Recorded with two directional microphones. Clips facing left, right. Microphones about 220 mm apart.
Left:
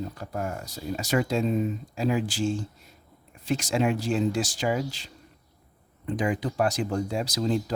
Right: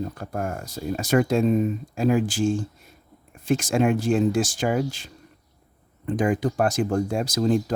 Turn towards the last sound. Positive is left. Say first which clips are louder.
# right 4 dB
turn(degrees=-50)  # may be behind; listen again after turning